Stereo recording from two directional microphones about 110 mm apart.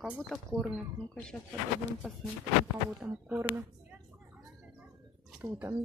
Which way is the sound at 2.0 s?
5° right (ahead or behind).